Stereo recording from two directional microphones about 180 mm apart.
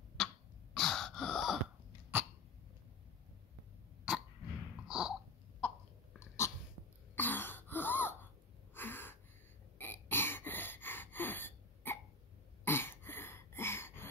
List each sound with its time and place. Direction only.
0.2 s throat clearing: centre (ahead or behind)
0.7 s gasp: centre (ahead or behind)
4.1 s throat clearing: 5° right (ahead or behind)
4.8 s a sound: 5° right (ahead or behind)
6.1 s dog: 15° left (ahead or behind)
7.2 s throat clearing: 10° left (ahead or behind)
8.7 s gasp: 10° left (ahead or behind)
9.8 s a sound: 10° left (ahead or behind)